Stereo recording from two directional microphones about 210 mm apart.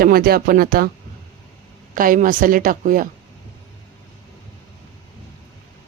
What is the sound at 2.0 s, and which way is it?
A woman's voice, 40° right (ahead or behind).